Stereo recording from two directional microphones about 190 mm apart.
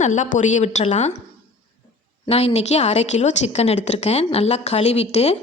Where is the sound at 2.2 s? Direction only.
30° left (ahead or behind).